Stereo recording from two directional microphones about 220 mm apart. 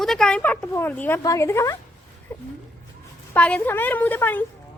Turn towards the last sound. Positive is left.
turn(degrees=10)  # may be behind; listen again after turning